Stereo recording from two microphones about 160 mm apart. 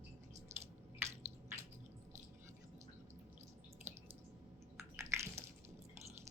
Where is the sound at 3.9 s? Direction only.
15° right (ahead or behind).